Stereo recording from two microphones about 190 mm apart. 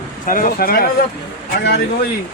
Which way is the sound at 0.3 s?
45° left (ahead or behind).